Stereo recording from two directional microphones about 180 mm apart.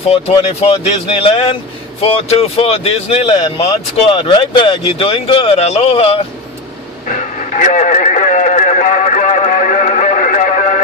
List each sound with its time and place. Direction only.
0.1 s speech: 30° left (ahead or behind)
7.1 s radio: 45° left (ahead or behind)